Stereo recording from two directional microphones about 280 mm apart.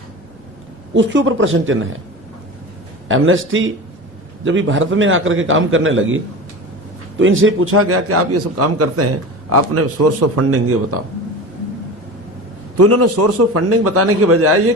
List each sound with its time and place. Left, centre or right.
0.9 s a man's voice: right
3.1 s a man's voice: right
12.7 s a man's voice: right